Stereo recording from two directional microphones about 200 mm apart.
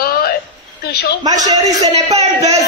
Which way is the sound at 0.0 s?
50° left (ahead or behind).